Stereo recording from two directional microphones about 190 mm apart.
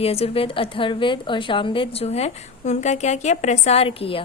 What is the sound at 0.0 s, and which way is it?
A woman's voice, 30° left (ahead or behind).